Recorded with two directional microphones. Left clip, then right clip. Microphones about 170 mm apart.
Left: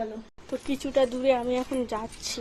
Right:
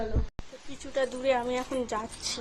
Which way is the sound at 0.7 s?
15° left (ahead or behind).